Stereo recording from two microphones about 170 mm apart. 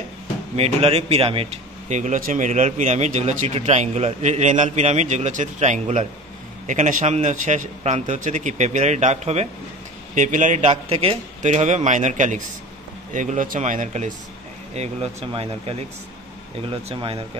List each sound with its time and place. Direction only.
0.6 s a man's voice: 35° right (ahead or behind)